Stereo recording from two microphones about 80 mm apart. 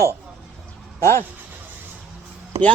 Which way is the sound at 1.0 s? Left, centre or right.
Left.